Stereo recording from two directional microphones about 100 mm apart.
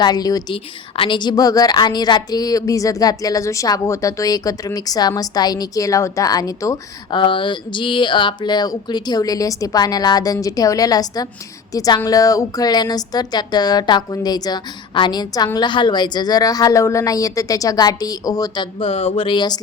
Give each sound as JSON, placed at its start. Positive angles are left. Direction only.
{"t": 0.0, "sound": "a woman's voice", "side_deg": 40}
{"t": 0.5, "sound": "a woman's voice", "side_deg": 60}
{"t": 7.1, "sound": "a woman's voice", "side_deg": 55}
{"t": 18.9, "sound": "speech", "side_deg": 85}